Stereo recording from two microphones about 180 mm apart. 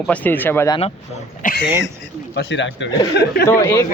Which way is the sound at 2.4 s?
85° left.